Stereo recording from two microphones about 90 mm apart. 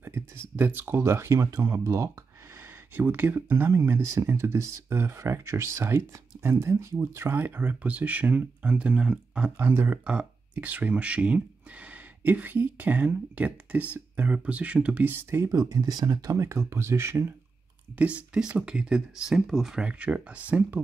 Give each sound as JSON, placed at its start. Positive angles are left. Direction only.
{"t": 0.0, "sound": "speech", "side_deg": -25}
{"t": 3.0, "sound": "speech", "side_deg": -25}
{"t": 9.6, "sound": "speech", "side_deg": -20}
{"t": 15.5, "sound": "speech", "side_deg": -40}
{"t": 17.9, "sound": "speech", "side_deg": -15}